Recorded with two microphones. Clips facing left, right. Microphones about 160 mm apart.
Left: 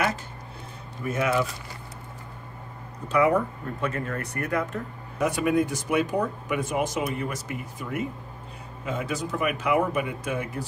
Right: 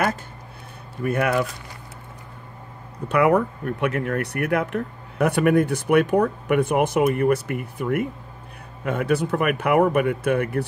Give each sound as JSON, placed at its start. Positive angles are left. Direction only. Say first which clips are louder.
{"t": 1.0, "sound": "speech", "louder": "right 3 dB", "side_deg": -60}
{"t": 3.1, "sound": "speech", "louder": "right 3 dB", "side_deg": -65}